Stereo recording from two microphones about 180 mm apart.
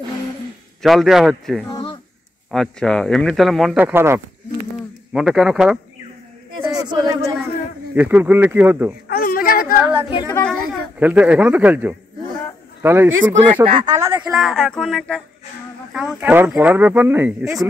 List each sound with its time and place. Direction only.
0.8 s speech: centre (ahead or behind)
1.7 s a sound: 25° left (ahead or behind)
2.5 s speech: 5° left (ahead or behind)
3.8 s speech: 15° right (ahead or behind)
6.6 s a sound: 20° right (ahead or behind)
7.4 s speech: 10° right (ahead or behind)
9.0 s a sound: 55° left (ahead or behind)
9.8 s yodeling: 10° right (ahead or behind)
10.0 s a sound: 25° left (ahead or behind)
10.7 s speech: 10° right (ahead or behind)
13.7 s speech: 25° right (ahead or behind)
14.2 s speech: centre (ahead or behind)